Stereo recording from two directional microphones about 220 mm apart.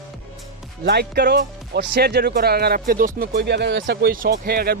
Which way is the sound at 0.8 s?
45° right (ahead or behind).